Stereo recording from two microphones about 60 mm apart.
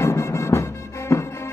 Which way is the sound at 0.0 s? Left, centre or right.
Left.